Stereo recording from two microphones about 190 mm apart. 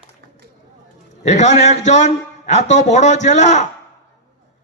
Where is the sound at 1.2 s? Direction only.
40° left (ahead or behind).